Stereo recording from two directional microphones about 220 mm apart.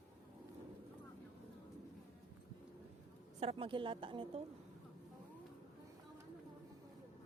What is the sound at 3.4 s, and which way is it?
A woman's voice, 25° right (ahead or behind).